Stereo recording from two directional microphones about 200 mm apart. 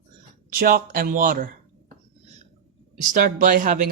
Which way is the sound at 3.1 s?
40° right (ahead or behind).